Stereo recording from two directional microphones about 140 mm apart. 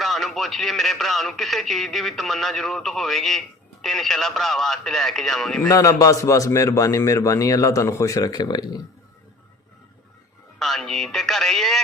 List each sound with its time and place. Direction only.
0.0 s a man's voice: centre (ahead or behind)
5.6 s a man's voice: 20° left (ahead or behind)
10.6 s a man's voice: centre (ahead or behind)